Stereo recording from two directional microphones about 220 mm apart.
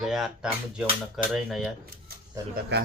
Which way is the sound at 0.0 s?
Centre (ahead or behind).